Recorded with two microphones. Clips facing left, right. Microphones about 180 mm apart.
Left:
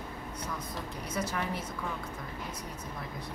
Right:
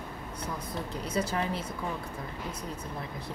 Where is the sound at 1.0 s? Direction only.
30° right (ahead or behind).